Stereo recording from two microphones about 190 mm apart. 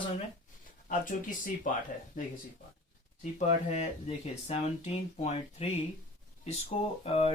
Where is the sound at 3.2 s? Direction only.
35° left (ahead or behind).